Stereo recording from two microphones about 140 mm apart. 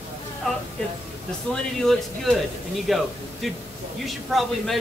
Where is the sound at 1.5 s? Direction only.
5° left (ahead or behind).